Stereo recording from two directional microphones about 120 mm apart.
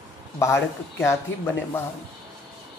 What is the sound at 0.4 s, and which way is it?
Speech, 20° left (ahead or behind).